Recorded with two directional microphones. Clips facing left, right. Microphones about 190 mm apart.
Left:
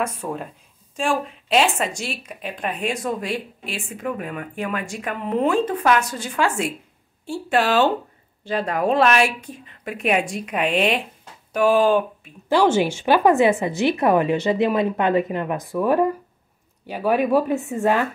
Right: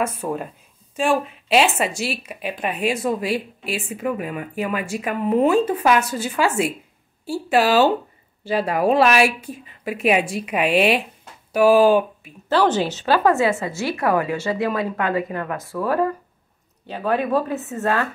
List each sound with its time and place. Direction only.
0.0 s a woman's voice: 5° right (ahead or behind)
12.4 s speech: 10° left (ahead or behind)